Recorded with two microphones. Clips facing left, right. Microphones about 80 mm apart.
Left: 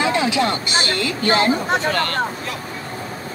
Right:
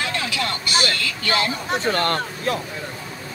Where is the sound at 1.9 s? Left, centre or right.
Right.